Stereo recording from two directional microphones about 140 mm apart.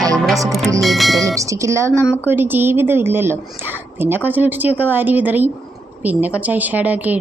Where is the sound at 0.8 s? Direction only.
Centre (ahead or behind).